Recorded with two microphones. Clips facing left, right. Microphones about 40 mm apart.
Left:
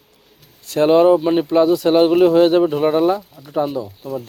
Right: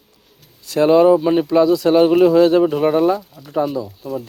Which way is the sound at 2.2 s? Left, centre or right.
Left.